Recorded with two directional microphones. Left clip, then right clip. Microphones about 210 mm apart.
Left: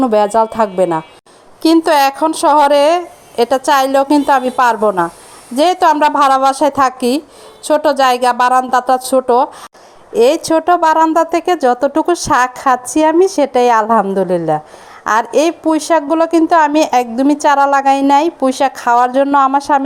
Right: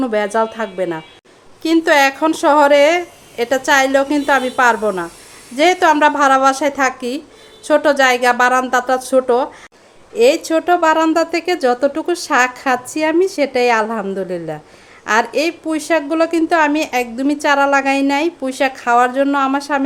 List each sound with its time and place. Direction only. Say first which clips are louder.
0.3 s a woman's voice: left 6 dB; 20° left (ahead or behind)
14.3 s a woman's voice: left 10 dB; 5° right (ahead or behind)
15.0 s a woman's voice: left 3 dB; 20° left (ahead or behind)